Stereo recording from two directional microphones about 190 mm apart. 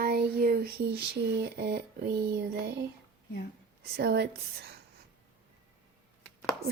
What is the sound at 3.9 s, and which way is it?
Speech, 55° right (ahead or behind).